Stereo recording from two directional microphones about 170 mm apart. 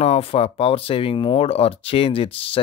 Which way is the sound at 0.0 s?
35° left (ahead or behind).